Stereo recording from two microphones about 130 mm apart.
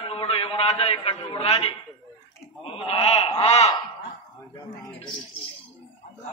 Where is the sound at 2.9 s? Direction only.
50° left (ahead or behind).